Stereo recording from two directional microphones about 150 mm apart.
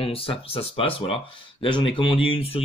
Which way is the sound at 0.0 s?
40° left (ahead or behind).